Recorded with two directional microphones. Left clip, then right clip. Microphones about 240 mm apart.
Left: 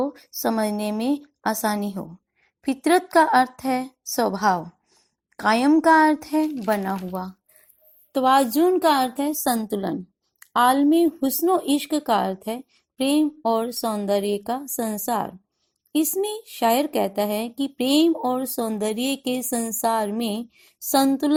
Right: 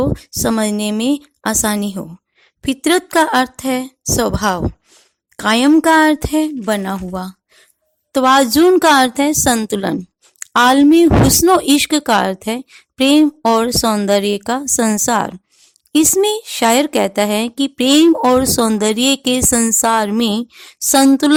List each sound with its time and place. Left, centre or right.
0.0 s speech: right